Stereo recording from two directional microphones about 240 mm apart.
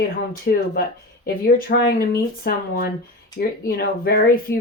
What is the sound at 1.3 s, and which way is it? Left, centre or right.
Speech, left.